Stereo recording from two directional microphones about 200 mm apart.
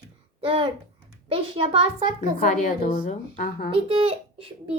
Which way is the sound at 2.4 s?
35° left (ahead or behind).